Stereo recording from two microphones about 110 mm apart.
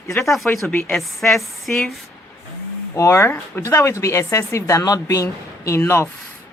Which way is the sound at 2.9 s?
25° left (ahead or behind).